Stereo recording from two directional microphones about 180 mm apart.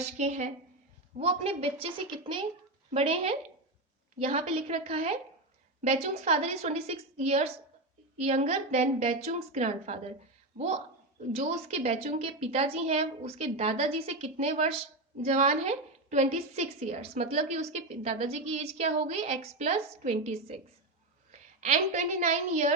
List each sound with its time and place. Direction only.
0.0 s a woman's voice: 40° right (ahead or behind)
11.3 s a woman's voice: 35° right (ahead or behind)